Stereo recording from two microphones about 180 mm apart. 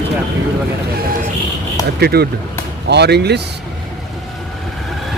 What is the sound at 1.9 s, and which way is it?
Speech, 60° right (ahead or behind).